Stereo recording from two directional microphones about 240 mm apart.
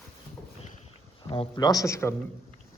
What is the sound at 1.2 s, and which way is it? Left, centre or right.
Speech, left.